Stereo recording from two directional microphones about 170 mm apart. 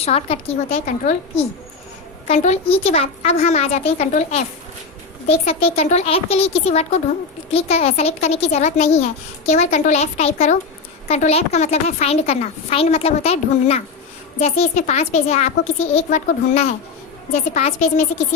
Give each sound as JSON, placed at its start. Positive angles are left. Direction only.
{"t": 0.0, "sound": "a woman's voice", "side_deg": 35}
{"t": 2.2, "sound": "a woman's voice", "side_deg": 40}